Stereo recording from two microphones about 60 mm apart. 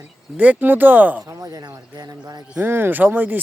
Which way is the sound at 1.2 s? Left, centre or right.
Right.